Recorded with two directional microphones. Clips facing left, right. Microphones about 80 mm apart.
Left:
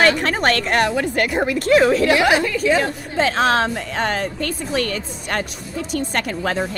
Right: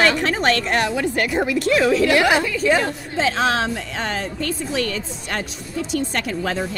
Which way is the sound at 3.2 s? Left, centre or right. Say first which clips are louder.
Left 3 dB; left.